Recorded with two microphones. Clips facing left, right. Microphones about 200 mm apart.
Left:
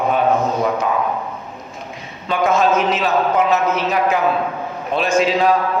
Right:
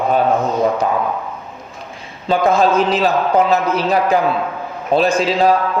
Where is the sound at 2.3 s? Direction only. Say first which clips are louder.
Right 2 dB; 35° right (ahead or behind).